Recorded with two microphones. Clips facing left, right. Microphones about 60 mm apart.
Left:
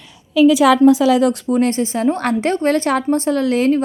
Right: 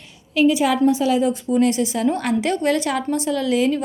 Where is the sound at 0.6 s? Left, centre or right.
Left.